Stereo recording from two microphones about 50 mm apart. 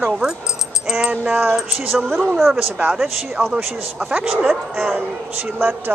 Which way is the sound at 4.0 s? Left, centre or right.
Right.